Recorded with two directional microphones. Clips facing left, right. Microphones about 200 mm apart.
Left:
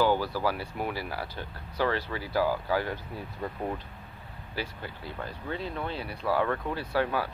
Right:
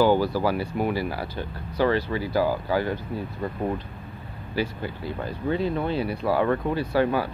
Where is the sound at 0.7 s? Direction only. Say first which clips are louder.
Right 7 dB; 5° right (ahead or behind).